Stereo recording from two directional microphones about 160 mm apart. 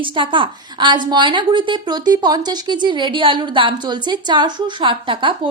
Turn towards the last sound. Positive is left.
turn(degrees=-30)  # may be behind; listen again after turning